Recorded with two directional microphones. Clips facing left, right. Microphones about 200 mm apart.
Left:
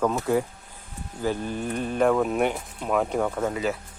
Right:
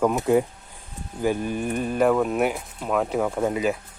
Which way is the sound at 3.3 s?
15° right (ahead or behind).